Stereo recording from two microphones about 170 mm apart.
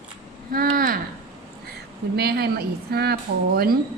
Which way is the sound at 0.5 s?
55° right (ahead or behind).